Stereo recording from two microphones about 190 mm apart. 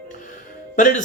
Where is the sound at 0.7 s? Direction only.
45° left (ahead or behind).